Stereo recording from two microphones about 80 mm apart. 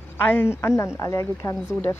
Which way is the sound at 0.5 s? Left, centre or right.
Left.